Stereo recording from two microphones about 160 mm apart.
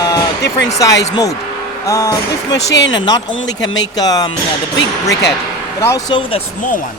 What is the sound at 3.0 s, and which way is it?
Speech, 25° left (ahead or behind).